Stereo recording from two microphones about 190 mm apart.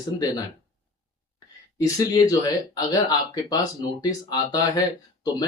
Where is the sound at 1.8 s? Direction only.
20° left (ahead or behind).